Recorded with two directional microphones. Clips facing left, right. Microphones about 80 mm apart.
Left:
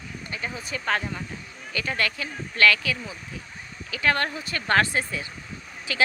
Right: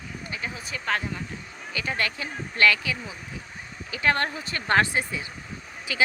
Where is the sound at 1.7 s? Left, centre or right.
Centre.